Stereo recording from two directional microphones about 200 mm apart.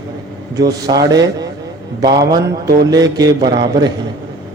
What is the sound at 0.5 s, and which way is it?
A man's voice, 20° right (ahead or behind).